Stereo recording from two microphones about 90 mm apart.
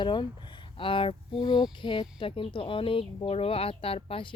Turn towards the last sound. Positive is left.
turn(degrees=85)